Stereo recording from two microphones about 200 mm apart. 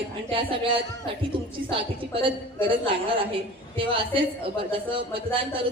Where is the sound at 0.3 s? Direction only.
25° right (ahead or behind).